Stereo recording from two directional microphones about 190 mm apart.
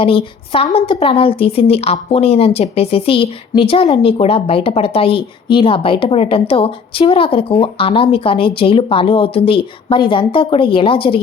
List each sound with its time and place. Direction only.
0.0 s a woman's voice: 30° left (ahead or behind)